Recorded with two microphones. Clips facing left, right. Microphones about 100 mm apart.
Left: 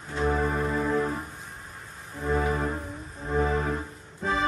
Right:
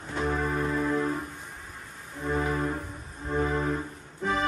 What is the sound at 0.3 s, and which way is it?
Music, 5° left (ahead or behind).